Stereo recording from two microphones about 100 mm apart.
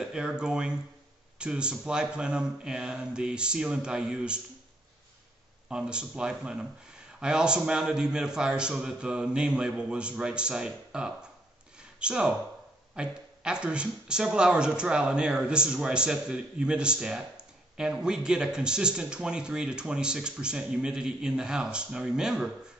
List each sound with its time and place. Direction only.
0.0 s speech: 5° right (ahead or behind)
5.7 s speech: 10° right (ahead or behind)